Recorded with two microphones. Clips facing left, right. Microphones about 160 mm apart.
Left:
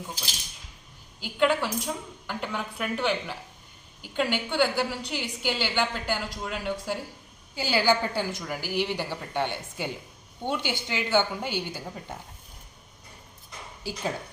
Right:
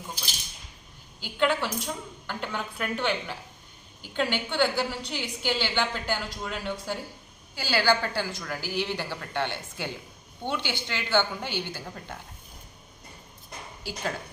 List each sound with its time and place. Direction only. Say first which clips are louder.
1.2 s a woman's voice: left 2 dB; 5° left (ahead or behind)